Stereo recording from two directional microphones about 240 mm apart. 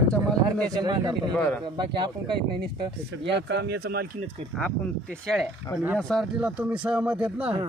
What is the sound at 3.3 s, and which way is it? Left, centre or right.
Speech, right.